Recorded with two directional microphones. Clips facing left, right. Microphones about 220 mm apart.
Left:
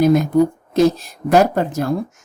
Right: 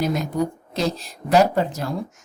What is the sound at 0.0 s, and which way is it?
A woman's voice, 55° left (ahead or behind).